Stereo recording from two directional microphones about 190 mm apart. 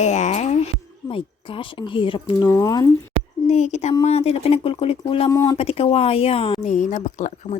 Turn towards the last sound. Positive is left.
turn(degrees=40)  # may be behind; listen again after turning